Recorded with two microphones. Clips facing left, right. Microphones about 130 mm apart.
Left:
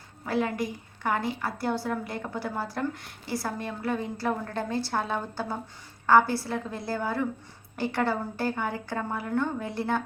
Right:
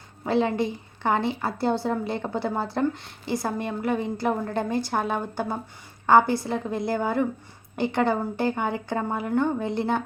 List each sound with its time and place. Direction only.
0.3 s a woman's voice: 25° right (ahead or behind)